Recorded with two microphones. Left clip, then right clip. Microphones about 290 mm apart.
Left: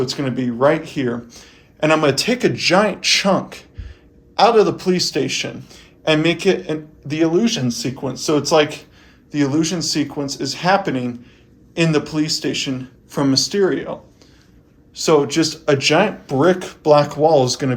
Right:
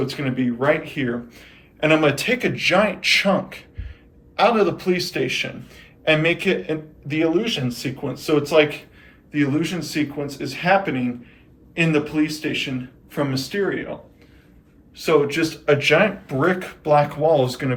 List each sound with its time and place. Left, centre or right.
0.3 s speech: centre
14.9 s speech: centre